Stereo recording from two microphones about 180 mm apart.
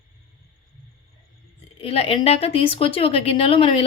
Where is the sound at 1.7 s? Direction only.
35° left (ahead or behind).